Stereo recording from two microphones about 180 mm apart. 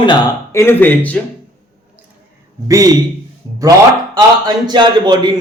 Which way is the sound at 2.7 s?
20° right (ahead or behind).